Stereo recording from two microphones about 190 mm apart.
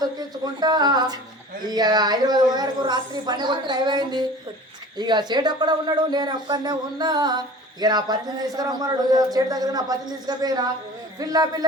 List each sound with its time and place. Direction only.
0.0 s speech: 20° right (ahead or behind)